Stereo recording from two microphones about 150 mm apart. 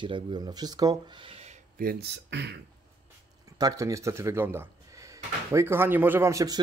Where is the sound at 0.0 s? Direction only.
30° right (ahead or behind).